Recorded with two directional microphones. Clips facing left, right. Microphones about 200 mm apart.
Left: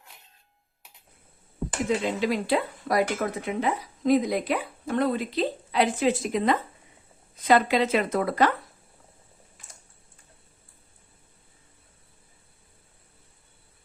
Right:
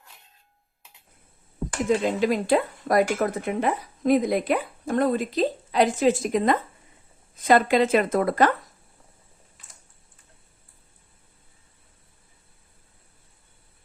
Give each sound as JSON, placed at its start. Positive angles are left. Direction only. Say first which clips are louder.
{"t": 2.0, "sound": "speech", "louder": "right 3 dB", "side_deg": -45}